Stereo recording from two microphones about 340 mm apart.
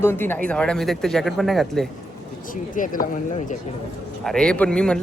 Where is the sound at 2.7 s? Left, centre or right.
Left.